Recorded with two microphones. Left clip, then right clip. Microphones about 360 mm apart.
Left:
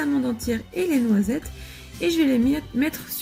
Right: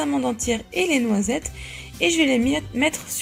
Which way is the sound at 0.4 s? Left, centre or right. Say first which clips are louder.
Right 3 dB; right.